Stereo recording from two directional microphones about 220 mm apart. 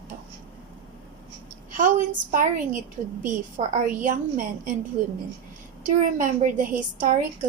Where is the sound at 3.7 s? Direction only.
35° right (ahead or behind).